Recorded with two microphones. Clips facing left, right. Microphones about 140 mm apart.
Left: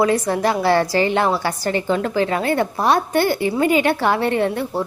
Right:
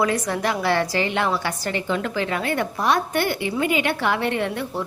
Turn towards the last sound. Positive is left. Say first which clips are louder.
# left 5 dB
turn(degrees=35)  # may be behind; listen again after turning